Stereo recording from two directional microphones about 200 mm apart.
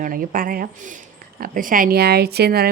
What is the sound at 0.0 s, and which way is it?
A woman's voice, 45° right (ahead or behind).